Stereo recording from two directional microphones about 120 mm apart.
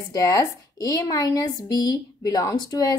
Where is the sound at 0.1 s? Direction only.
30° left (ahead or behind).